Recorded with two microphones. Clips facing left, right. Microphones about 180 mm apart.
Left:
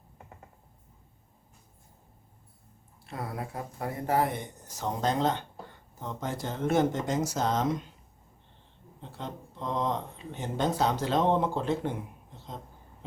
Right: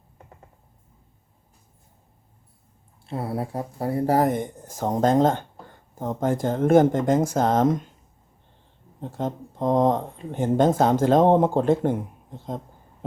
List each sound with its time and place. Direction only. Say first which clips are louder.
3.1 s speech: right 8 dB; 30° right (ahead or behind); by 7.9 s 50° right (ahead or behind)
9.0 s speech: right 11 dB; 45° right (ahead or behind)